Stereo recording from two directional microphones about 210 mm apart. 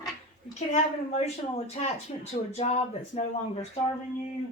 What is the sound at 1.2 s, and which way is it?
Speech, 30° left (ahead or behind).